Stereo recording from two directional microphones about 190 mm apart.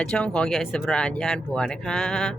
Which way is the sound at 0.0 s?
5° left (ahead or behind).